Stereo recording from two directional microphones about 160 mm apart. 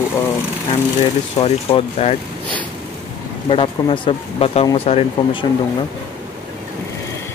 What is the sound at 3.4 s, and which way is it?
Speech, 35° left (ahead or behind).